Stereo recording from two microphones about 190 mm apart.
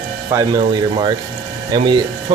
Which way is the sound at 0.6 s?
25° right (ahead or behind).